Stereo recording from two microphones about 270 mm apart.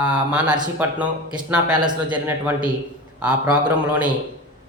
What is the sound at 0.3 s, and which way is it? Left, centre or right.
Speech, centre.